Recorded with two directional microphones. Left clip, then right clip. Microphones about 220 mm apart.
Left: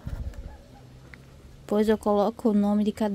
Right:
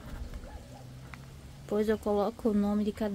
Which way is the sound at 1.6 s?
35° left (ahead or behind).